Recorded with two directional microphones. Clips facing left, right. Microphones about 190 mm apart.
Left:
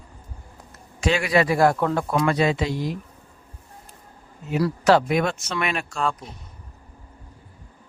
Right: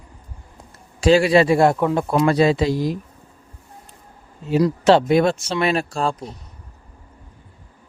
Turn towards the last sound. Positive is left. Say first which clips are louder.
# right 3 dB
turn(degrees=-35)  # may be behind; listen again after turning